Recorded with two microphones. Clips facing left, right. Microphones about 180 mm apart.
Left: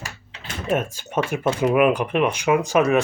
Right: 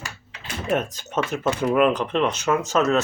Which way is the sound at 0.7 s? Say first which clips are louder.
Left 1 dB; 10° left (ahead or behind).